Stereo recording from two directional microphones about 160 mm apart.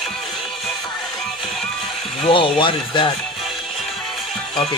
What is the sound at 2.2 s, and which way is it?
Speech, 30° left (ahead or behind).